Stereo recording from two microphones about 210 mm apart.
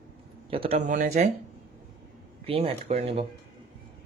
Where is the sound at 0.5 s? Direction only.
25° right (ahead or behind).